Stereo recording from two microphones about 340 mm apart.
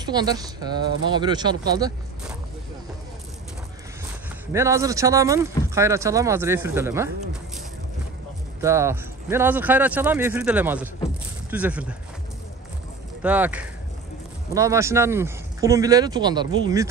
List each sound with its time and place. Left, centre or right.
0.0 s speech: centre
4.5 s speech: centre
8.5 s speech: centre
13.2 s speech: centre